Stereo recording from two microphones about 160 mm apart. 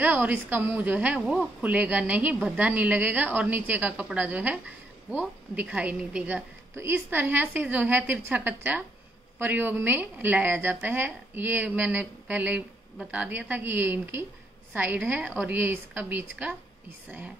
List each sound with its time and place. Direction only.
0.0 s a woman's voice: 10° right (ahead or behind)